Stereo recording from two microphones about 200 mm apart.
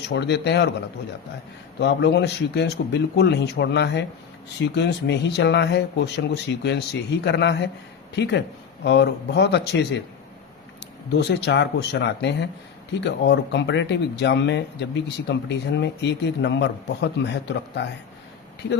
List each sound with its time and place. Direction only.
0.1 s speech: 55° left (ahead or behind)
1.8 s speech: 60° left (ahead or behind)
11.1 s speech: 60° left (ahead or behind)